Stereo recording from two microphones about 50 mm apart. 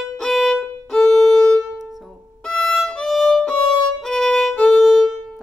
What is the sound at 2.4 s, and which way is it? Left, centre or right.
Violin, centre.